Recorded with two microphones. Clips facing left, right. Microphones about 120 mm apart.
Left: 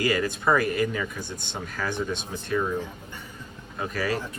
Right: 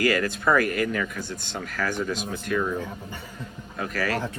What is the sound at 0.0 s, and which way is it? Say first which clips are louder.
Speech: right 1 dB; 20° left (ahead or behind).